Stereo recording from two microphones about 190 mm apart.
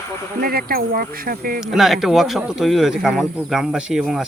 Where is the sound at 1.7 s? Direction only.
Centre (ahead or behind).